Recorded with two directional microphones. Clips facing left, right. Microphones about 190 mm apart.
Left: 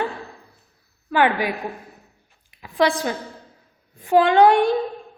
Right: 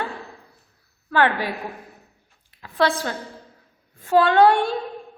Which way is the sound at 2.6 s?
15° left (ahead or behind).